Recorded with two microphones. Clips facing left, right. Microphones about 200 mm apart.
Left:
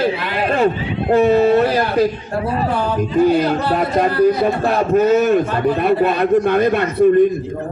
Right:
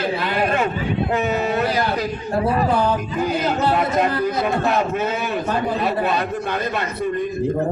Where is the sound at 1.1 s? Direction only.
35° left (ahead or behind); by 7.1 s 55° left (ahead or behind).